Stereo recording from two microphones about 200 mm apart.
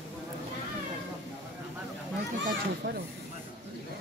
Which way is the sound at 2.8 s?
60° right (ahead or behind).